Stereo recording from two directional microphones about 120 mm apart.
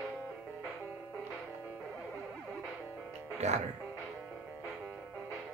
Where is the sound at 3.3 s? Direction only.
65° right (ahead or behind).